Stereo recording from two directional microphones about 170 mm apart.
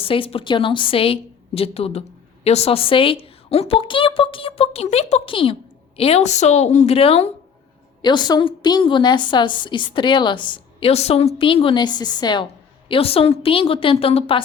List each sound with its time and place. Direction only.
0.0 s a woman's voice: 30° left (ahead or behind)
8.0 s a woman's voice: 25° left (ahead or behind)